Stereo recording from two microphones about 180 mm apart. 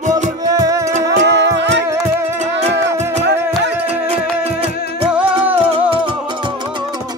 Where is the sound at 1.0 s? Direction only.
75° right (ahead or behind).